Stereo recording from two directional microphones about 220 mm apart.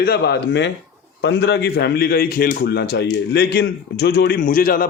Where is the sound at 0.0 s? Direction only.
45° left (ahead or behind).